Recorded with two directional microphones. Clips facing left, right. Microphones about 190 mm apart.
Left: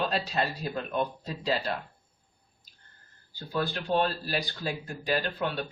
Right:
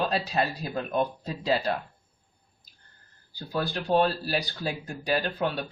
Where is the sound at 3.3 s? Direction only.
40° right (ahead or behind).